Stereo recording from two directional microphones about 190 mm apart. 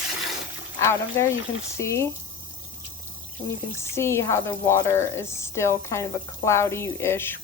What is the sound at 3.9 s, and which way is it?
Speech, 15° left (ahead or behind).